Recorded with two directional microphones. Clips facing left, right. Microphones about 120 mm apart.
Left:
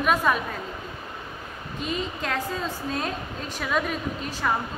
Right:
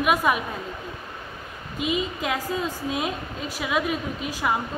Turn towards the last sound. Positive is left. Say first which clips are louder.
# right 1 dB
turn(degrees=-10)  # may be behind; listen again after turning